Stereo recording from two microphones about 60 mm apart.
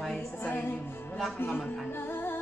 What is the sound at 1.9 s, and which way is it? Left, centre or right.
Music, left.